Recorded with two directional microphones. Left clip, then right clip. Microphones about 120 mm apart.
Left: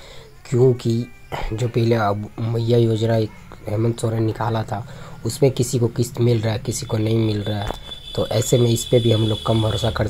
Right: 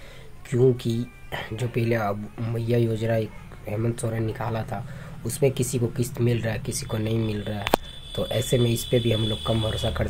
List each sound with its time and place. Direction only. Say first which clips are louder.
0.5 s speech: left 4 dB; 40° left (ahead or behind)